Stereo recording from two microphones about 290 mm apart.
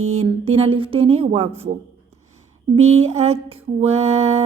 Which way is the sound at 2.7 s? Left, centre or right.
Right.